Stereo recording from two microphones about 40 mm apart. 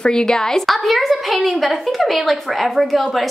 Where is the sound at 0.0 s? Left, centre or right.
Centre.